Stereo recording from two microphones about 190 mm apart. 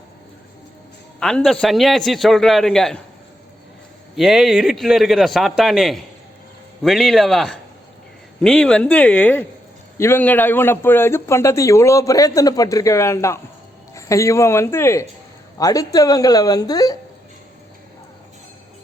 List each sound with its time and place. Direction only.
1.2 s a man's voice: centre (ahead or behind)
4.1 s a man's voice: centre (ahead or behind); by 17.0 s 20° left (ahead or behind)